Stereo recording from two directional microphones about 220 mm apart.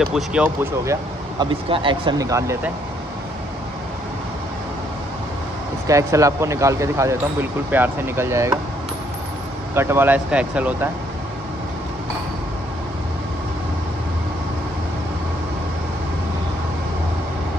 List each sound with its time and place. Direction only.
0.0 s speech: centre (ahead or behind)
1.7 s speech: 20° right (ahead or behind)
5.9 s speech: 15° right (ahead or behind)
9.7 s speech: 10° right (ahead or behind)